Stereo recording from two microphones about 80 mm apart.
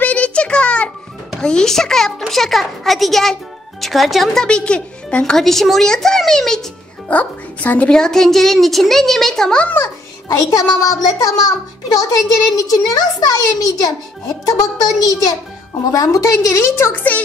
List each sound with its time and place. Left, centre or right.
0.0 s a sound: centre
1.4 s a child's voice: centre
7.1 s speech: centre
7.9 s speech: centre
10.2 s a child's voice: left
12.4 s a child's voice: left
16.9 s speech: left